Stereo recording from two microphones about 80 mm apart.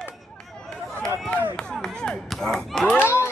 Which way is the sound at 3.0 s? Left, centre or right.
Left.